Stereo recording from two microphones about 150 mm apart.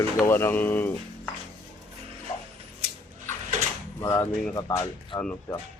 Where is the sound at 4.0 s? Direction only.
20° left (ahead or behind).